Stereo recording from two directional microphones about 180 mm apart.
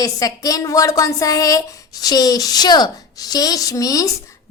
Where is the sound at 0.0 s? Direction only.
20° left (ahead or behind).